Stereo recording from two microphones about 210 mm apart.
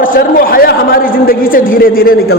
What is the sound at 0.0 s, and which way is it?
A man's voice, 40° left (ahead or behind).